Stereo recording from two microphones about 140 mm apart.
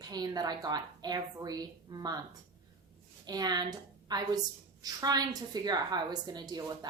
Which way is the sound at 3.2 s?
30° right (ahead or behind).